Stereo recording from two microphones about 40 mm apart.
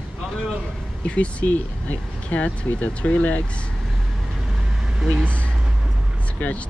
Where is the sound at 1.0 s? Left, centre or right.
Left.